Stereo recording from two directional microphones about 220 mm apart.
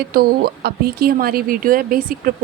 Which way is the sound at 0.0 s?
45° right (ahead or behind).